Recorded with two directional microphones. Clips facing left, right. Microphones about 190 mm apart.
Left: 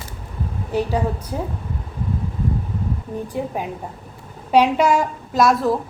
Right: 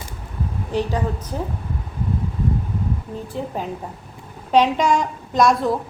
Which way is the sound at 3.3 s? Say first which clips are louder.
Even; 10° left (ahead or behind).